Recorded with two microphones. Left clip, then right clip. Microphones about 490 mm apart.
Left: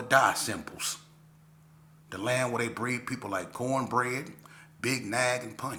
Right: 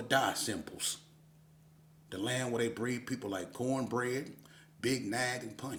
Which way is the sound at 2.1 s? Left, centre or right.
Right.